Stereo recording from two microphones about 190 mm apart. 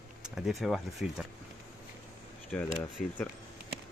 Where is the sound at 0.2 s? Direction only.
Centre (ahead or behind).